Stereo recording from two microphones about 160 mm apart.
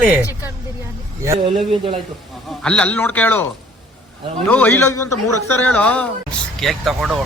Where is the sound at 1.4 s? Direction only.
35° right (ahead or behind).